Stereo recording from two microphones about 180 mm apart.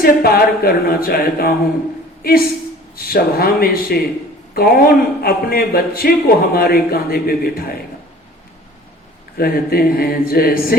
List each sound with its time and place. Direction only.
0.0 s a man's voice: 55° left (ahead or behind)
2.9 s a man's voice: 55° left (ahead or behind)
9.4 s a man's voice: 55° left (ahead or behind)